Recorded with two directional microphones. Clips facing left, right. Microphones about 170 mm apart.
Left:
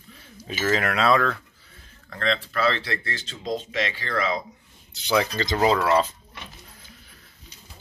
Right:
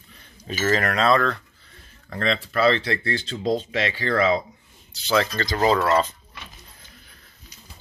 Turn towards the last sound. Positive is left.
turn(degrees=5)  # may be behind; listen again after turning